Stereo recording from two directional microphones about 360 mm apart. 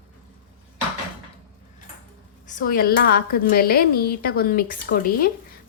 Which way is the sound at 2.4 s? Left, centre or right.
Left.